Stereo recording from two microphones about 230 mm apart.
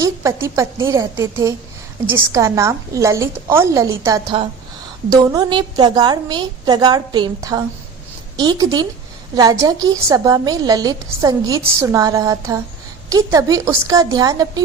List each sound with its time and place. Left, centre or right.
0.0 s a woman's voice: centre